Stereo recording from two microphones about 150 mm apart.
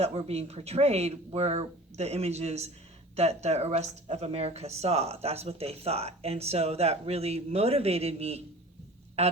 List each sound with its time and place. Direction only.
0.0 s speech: 45° right (ahead or behind)